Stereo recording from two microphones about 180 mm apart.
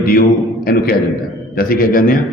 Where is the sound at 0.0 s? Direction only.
55° left (ahead or behind).